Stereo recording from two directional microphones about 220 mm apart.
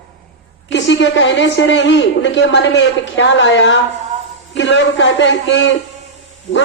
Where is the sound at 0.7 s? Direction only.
55° left (ahead or behind).